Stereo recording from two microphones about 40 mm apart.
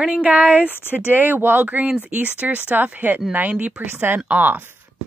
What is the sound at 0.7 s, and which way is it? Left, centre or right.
Speech, left.